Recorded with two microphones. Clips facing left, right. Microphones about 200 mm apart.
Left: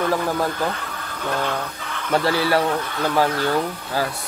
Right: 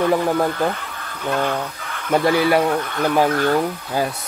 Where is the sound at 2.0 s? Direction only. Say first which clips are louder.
Right 3 dB; 15° right (ahead or behind).